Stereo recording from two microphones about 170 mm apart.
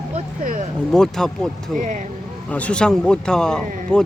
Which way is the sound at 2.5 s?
5° left (ahead or behind).